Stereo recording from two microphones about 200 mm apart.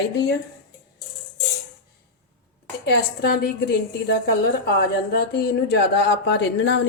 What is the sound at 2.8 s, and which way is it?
Speech, 55° left (ahead or behind).